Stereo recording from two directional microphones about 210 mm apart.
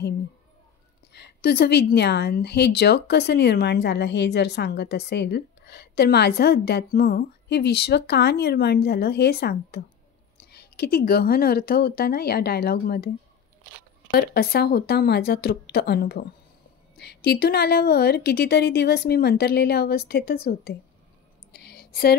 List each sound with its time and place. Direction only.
1.1 s a woman's voice: 50° left (ahead or behind)
14.1 s a woman's voice: 50° left (ahead or behind)
21.5 s a sound: 50° left (ahead or behind)